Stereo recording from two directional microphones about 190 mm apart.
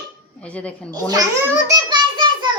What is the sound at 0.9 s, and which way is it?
Speech, 20° right (ahead or behind).